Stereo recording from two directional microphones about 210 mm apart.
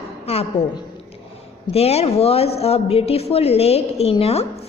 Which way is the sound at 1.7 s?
30° left (ahead or behind).